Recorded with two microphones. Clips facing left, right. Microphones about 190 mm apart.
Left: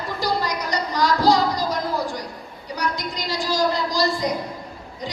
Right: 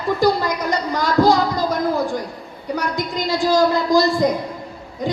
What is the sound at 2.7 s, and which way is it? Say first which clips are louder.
A woman's voice: right 4 dB; 55° right (ahead or behind).